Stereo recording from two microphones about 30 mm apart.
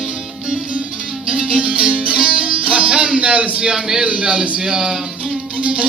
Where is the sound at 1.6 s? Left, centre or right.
Right.